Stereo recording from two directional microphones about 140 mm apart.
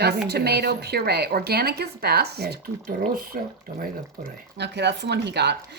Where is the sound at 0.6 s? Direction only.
90° right.